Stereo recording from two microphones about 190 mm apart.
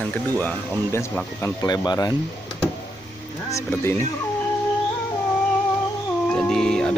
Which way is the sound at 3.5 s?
15° left (ahead or behind).